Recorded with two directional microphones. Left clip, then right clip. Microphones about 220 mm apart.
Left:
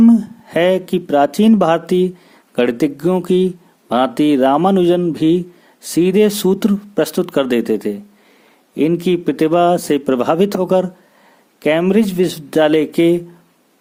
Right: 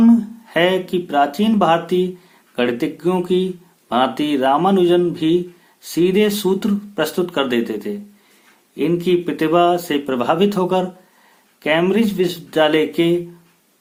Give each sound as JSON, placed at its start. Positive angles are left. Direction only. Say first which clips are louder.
{"t": 0.0, "sound": "speech", "louder": "left 2 dB", "side_deg": 45}